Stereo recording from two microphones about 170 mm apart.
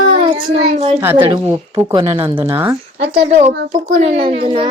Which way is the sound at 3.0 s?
40° right (ahead or behind).